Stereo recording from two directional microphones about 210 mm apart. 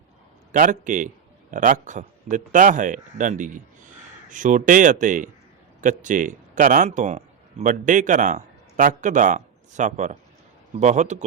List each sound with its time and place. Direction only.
0.5 s a man's voice: 40° right (ahead or behind)